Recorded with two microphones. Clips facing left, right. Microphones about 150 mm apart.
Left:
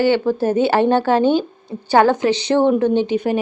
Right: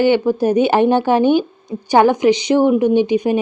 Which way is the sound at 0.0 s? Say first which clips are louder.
Right 2 dB; 15° right (ahead or behind).